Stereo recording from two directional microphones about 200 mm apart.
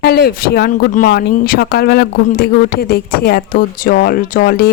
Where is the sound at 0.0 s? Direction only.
50° left (ahead or behind).